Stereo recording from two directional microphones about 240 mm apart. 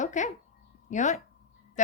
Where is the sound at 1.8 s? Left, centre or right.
Left.